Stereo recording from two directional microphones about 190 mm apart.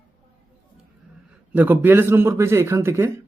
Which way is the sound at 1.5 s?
10° right (ahead or behind).